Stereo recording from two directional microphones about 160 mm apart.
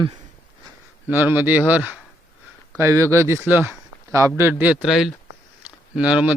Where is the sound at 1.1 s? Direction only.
10° right (ahead or behind).